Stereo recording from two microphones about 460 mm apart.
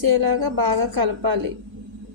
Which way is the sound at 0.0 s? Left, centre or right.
Right.